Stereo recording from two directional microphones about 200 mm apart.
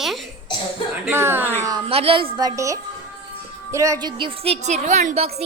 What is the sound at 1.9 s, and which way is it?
A woman's voice, 30° right (ahead or behind).